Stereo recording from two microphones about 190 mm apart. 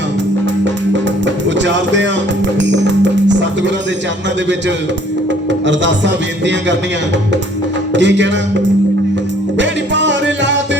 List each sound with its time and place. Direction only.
1.5 s music: 70° right (ahead or behind)
5.5 s a man's voice: 70° right (ahead or behind)
7.9 s a man's voice: 70° right (ahead or behind)
9.6 s music: 70° right (ahead or behind)